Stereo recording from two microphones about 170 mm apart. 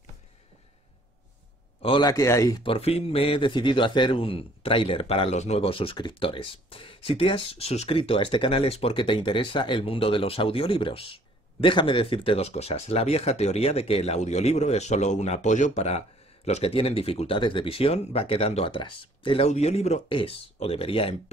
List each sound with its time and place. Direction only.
1.8 s speech: 30° left (ahead or behind)
2.6 s a man's voice: 35° left (ahead or behind)